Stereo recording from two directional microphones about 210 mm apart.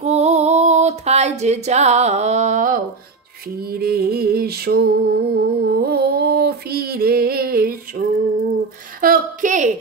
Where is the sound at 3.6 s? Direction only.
45° right (ahead or behind).